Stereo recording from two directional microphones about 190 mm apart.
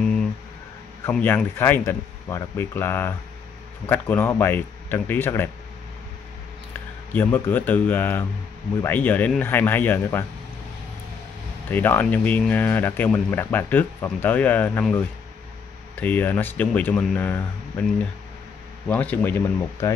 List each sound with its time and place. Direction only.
1.1 s speech: 10° left (ahead or behind)
6.7 s speech: 10° left (ahead or behind)
11.7 s speech: 10° left (ahead or behind)